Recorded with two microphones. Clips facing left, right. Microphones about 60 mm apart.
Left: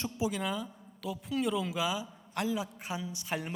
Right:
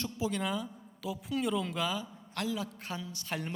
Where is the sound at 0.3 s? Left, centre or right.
Centre.